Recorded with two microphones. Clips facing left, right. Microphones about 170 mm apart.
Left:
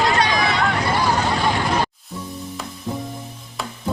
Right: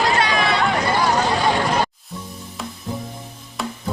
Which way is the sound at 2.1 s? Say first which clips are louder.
Left 2 dB; centre (ahead or behind).